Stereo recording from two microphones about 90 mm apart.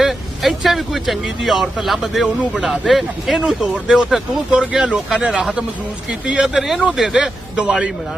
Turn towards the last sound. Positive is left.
turn(degrees=-10)  # may be behind; listen again after turning